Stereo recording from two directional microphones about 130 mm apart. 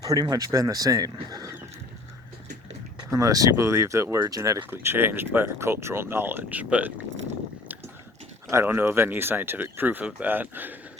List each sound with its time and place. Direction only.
0.0 s speech: 30° right (ahead or behind)
3.1 s speech: 25° right (ahead or behind)
8.4 s speech: 20° right (ahead or behind)